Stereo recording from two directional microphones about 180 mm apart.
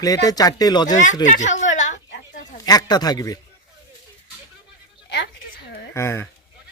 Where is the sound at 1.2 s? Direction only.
40° left (ahead or behind).